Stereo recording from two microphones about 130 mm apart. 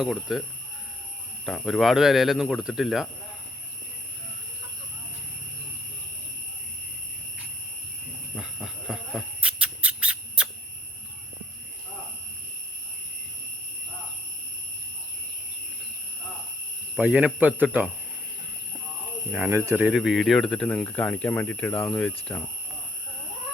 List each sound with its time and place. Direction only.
0.0 s speech: centre (ahead or behind)
1.5 s speech: centre (ahead or behind)
8.4 s a sound: 5° right (ahead or behind)
17.0 s speech: 10° right (ahead or behind)
19.5 s speech: 20° right (ahead or behind)
19.8 s speech: centre (ahead or behind)